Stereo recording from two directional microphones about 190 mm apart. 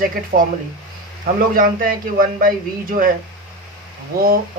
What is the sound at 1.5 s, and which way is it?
Speech, 45° right (ahead or behind).